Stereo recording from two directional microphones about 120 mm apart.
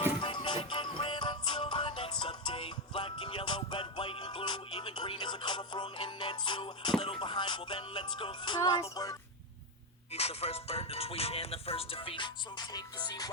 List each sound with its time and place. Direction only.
0.2 s music: 40° left (ahead or behind)
10.1 s music: 55° left (ahead or behind); by 13.3 s 35° left (ahead or behind)